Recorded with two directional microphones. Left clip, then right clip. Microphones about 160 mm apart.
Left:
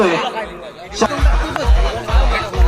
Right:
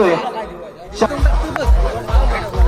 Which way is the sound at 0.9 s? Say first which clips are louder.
Even; 30° left (ahead or behind).